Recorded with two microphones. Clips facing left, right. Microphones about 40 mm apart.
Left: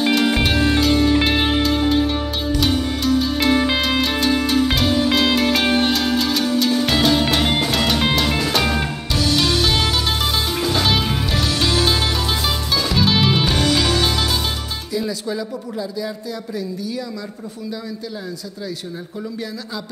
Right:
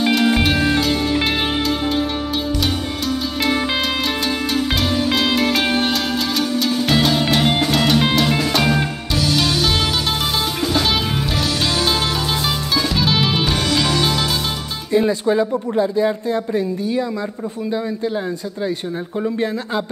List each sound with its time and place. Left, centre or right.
0.0 s music: centre
3.4 s music: centre
6.9 s music: centre
10.7 s music: centre
14.9 s speech: right
19.2 s speech: right